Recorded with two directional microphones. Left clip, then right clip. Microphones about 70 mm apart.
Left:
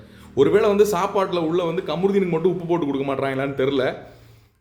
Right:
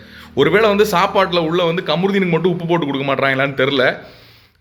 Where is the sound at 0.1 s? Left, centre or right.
Left.